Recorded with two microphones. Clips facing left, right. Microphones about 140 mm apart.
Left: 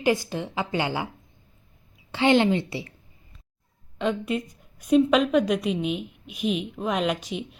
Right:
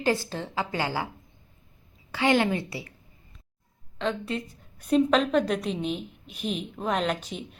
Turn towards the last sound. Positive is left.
turn(degrees=5)  # may be behind; listen again after turning